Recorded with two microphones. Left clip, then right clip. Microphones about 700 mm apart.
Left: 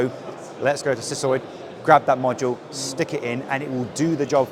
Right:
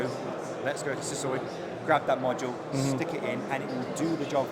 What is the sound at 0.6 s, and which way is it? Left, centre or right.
A man's voice, left.